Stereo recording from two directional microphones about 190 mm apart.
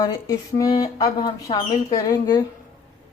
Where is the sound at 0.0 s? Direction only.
20° left (ahead or behind).